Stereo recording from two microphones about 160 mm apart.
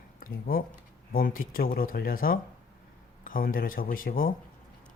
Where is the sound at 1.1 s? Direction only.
60° left (ahead or behind).